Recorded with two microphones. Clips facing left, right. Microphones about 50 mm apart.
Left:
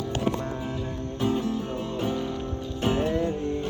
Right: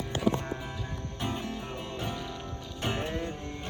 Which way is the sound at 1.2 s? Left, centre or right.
Right.